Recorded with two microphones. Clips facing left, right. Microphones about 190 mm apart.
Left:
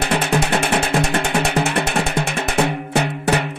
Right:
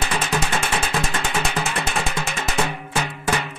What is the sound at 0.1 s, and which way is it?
Music, 65° left (ahead or behind).